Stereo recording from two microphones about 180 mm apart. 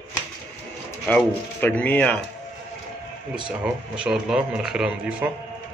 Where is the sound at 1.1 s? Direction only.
10° left (ahead or behind).